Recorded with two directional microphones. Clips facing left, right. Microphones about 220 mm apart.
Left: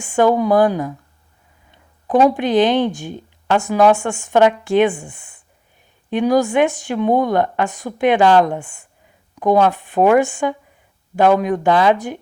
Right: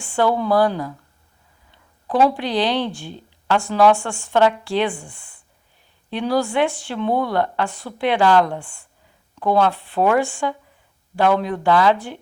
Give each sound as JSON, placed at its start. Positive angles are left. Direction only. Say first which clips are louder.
{"t": 0.0, "sound": "a woman's voice", "louder": "left 5 dB", "side_deg": 15}